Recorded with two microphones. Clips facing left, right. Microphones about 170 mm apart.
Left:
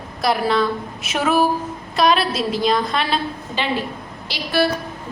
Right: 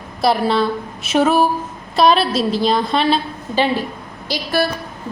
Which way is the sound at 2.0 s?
30° right (ahead or behind).